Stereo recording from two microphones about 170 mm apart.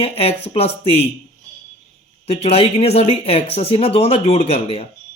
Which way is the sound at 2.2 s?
35° left (ahead or behind).